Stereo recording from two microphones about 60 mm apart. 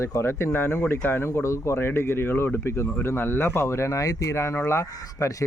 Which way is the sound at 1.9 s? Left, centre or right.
Left.